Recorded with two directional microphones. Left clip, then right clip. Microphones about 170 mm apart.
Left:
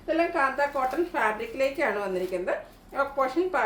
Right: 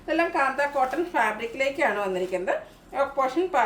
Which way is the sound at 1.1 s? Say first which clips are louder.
Right 2 dB; 15° right (ahead or behind).